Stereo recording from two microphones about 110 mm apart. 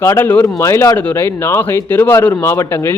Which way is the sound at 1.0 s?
20° left (ahead or behind).